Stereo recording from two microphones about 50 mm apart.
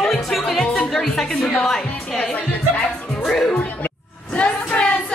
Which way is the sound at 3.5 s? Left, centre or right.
Left.